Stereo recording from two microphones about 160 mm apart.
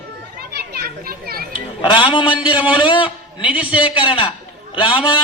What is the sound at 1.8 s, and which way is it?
Speech, 30° left (ahead or behind).